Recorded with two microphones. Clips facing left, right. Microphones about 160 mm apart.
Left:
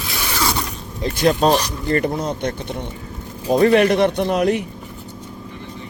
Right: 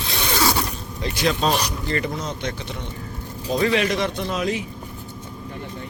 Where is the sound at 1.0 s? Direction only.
50° left (ahead or behind).